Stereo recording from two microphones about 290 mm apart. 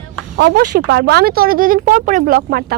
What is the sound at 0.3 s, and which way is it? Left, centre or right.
Speech, right.